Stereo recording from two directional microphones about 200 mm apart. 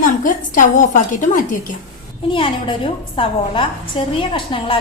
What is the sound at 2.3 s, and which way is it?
A woman's voice, 25° left (ahead or behind).